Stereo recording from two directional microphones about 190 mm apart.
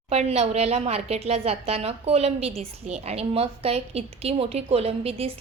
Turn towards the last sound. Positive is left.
turn(degrees=-30)  # may be behind; listen again after turning